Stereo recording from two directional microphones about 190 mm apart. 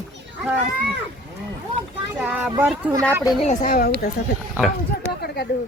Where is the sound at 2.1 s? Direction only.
10° right (ahead or behind).